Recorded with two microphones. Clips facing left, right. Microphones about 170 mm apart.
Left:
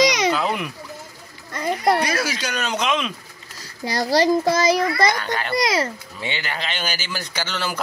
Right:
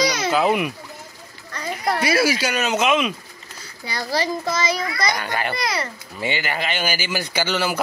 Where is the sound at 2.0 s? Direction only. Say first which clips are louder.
Right 4 dB; 10° right (ahead or behind).